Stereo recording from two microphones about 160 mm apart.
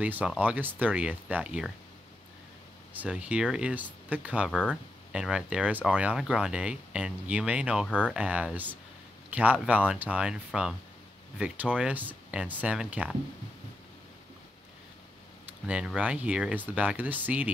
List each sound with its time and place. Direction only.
0.0 s speech: 10° right (ahead or behind)
3.0 s speech: 10° right (ahead or behind)
4.5 s speech: 5° left (ahead or behind)
5.1 s speech: 5° right (ahead or behind)
15.6 s speech: 5° right (ahead or behind)